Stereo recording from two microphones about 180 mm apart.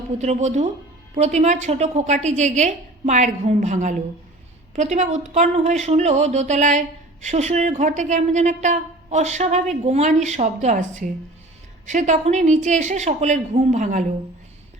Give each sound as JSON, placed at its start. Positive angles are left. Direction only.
{"t": 0.2, "sound": "speech", "side_deg": -40}